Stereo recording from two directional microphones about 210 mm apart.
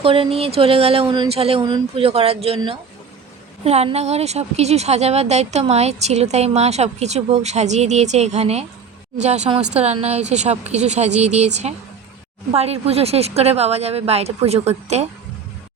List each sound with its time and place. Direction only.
0.0 s a woman's voice: 25° right (ahead or behind)